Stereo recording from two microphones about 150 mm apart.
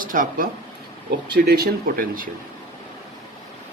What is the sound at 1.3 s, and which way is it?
Speech, 90° right.